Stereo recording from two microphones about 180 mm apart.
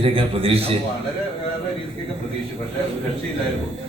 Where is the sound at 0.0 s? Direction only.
30° right (ahead or behind).